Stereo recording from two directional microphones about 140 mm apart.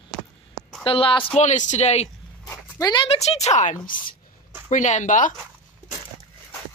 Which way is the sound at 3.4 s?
60° left (ahead or behind).